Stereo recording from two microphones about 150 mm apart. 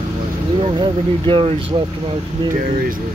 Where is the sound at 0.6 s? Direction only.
35° right (ahead or behind).